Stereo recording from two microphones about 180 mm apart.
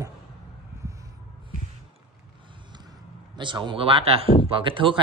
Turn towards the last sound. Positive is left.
turn(degrees=-30)  # may be behind; listen again after turning